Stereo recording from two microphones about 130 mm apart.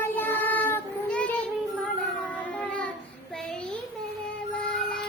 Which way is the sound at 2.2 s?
10° left (ahead or behind).